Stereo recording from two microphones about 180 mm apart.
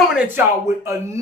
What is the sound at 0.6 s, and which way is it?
Speech, 15° right (ahead or behind).